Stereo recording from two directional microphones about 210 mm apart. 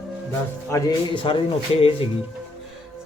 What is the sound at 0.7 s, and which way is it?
Speech, 20° left (ahead or behind).